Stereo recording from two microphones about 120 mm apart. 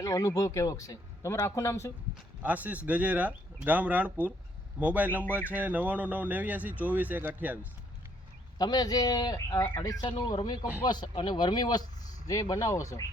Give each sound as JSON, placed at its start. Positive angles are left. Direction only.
{"t": 0.0, "sound": "speech", "side_deg": 30}
{"t": 2.4, "sound": "speech", "side_deg": -15}
{"t": 8.5, "sound": "speech", "side_deg": 35}